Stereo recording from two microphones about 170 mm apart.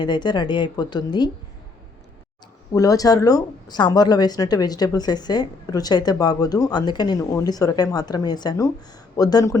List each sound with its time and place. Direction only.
0.0 s speech: 25° left (ahead or behind)
2.7 s speech: 20° left (ahead or behind)